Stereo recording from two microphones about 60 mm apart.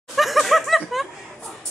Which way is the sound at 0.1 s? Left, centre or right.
Centre.